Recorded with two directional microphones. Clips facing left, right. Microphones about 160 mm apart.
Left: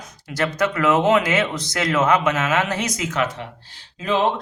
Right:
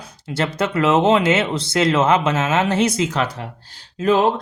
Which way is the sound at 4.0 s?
40° right (ahead or behind).